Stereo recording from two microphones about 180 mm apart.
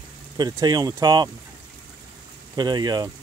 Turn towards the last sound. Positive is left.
turn(degrees=-20)  # may be behind; listen again after turning